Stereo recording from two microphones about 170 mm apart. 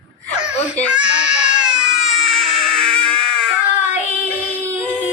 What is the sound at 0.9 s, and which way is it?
Baby cry, 5° right (ahead or behind).